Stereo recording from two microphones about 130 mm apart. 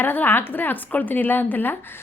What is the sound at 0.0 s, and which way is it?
A woman's voice, 15° left (ahead or behind).